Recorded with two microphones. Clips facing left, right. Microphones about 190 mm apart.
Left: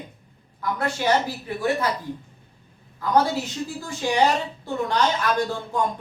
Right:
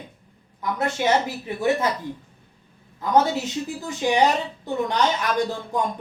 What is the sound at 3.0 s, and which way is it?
A man's voice, 20° right (ahead or behind).